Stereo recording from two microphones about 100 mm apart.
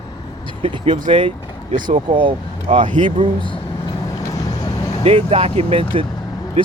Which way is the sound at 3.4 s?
55° left (ahead or behind).